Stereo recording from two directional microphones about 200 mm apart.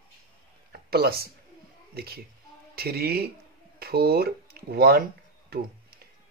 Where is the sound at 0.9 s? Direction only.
50° right (ahead or behind).